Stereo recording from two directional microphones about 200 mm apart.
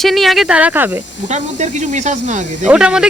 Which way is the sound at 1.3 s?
35° right (ahead or behind).